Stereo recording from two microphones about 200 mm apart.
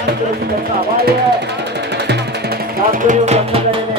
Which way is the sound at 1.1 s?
55° right (ahead or behind).